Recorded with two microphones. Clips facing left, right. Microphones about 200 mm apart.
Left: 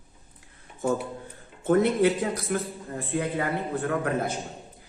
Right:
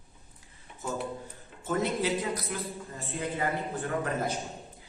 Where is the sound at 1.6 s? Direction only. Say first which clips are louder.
Left 8 dB; 55° left (ahead or behind).